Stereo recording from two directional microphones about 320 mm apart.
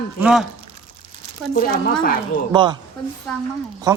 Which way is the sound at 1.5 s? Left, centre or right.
Left.